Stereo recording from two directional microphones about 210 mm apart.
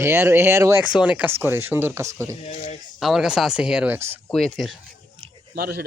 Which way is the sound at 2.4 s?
30° left (ahead or behind).